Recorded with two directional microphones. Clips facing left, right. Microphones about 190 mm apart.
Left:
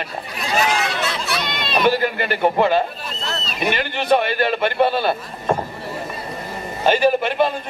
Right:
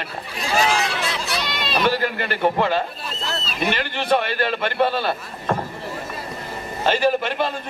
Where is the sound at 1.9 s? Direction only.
15° left (ahead or behind).